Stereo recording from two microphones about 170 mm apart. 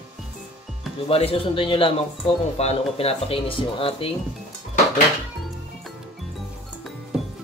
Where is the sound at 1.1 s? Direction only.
35° left (ahead or behind).